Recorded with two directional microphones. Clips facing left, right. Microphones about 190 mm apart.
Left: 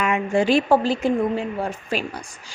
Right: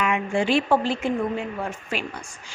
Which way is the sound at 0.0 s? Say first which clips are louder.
Left 3 dB; 40° left (ahead or behind).